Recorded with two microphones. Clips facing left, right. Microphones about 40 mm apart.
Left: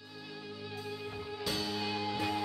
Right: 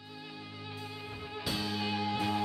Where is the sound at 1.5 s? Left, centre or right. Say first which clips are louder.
Right 1 dB; centre.